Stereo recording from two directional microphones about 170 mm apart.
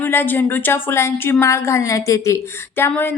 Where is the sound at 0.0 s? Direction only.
10° left (ahead or behind).